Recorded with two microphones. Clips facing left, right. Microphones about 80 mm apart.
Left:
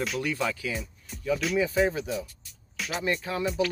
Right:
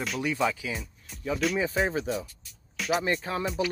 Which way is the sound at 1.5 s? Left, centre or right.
Right.